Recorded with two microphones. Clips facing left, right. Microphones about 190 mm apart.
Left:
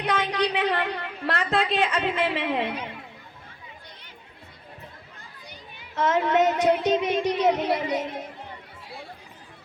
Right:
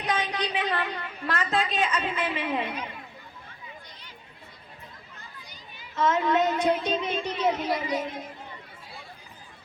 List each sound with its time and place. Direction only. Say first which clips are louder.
0.0 s a woman's voice: left 4 dB; 65° left (ahead or behind)
6.0 s speech: left 2 dB; 70° left (ahead or behind)